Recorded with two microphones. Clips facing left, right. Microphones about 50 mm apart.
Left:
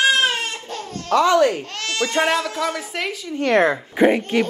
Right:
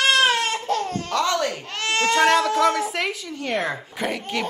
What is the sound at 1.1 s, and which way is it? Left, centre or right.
Speech, centre.